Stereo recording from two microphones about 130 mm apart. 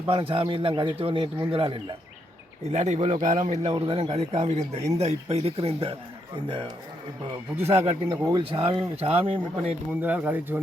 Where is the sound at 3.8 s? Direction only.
50° right (ahead or behind).